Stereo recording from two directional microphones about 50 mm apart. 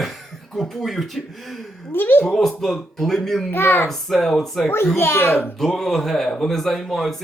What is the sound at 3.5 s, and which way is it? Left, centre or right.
Speech, left.